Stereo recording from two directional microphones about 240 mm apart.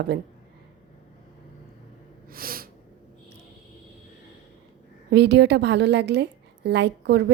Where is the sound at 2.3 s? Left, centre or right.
Right.